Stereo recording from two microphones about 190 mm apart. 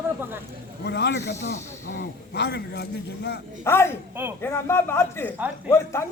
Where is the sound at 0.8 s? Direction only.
65° left (ahead or behind).